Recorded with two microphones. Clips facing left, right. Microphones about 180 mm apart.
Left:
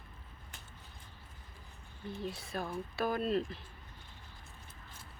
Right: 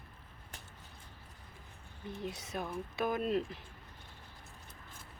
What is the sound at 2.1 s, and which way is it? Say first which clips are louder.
Speech: left 1 dB; 20° right (ahead or behind).